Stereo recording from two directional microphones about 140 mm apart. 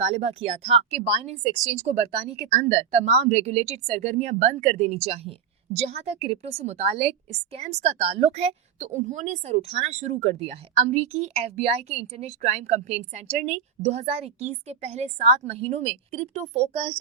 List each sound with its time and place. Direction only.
0.0 s speech: 50° right (ahead or behind)